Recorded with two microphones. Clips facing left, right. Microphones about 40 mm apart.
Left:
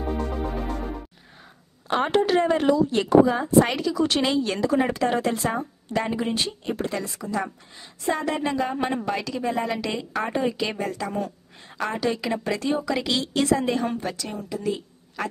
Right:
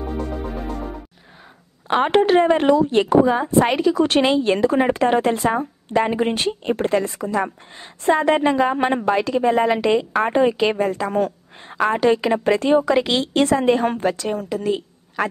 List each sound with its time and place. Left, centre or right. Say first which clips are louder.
0.0 s music: right 1 dB; centre
1.9 s a woman's voice: right 5 dB; right
3.4 s a woman's voice: right 3 dB; right
4.2 s a woman's voice: right 6 dB; right